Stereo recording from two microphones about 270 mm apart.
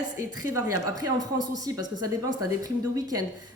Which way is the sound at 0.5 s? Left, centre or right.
Right.